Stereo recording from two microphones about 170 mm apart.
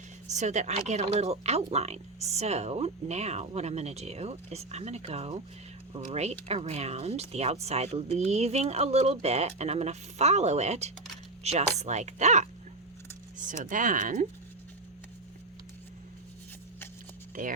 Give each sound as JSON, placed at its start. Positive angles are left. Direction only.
{"t": 0.3, "sound": "speech", "side_deg": -45}
{"t": 13.5, "sound": "speech", "side_deg": -50}
{"t": 17.4, "sound": "speech", "side_deg": -50}